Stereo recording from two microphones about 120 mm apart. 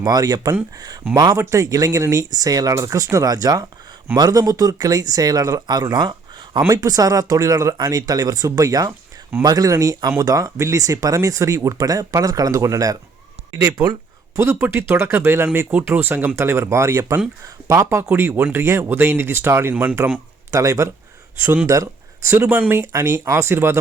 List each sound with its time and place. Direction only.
0.0 s speech: 35° right (ahead or behind)
14.3 s speech: 25° right (ahead or behind)
20.5 s speech: 25° right (ahead or behind)